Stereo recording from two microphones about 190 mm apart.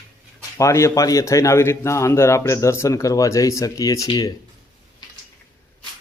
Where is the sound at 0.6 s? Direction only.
15° left (ahead or behind).